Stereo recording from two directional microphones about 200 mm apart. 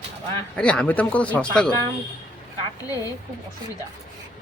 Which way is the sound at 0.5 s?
5° left (ahead or behind).